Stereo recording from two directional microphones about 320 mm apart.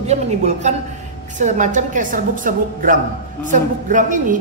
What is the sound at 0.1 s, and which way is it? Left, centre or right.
Speech, right.